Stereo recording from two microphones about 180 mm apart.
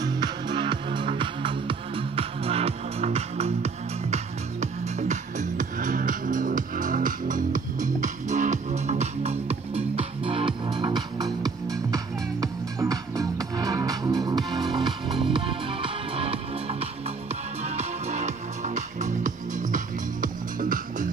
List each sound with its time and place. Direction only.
0.0 s music: 20° right (ahead or behind); by 21.1 s 50° right (ahead or behind)